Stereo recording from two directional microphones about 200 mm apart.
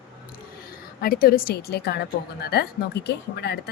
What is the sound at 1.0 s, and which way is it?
A woman's voice, 45° left (ahead or behind).